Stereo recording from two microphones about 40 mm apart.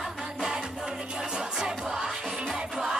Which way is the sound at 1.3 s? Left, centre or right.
Centre.